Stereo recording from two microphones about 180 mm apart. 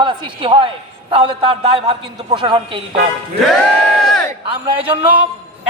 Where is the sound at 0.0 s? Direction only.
25° right (ahead or behind).